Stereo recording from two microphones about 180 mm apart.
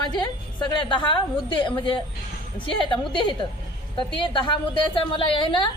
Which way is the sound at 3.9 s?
25° left (ahead or behind).